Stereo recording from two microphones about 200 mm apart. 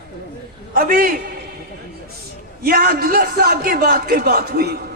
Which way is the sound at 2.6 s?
45° right (ahead or behind).